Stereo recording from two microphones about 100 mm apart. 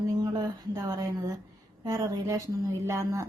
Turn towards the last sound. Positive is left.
turn(degrees=-30)  # may be behind; listen again after turning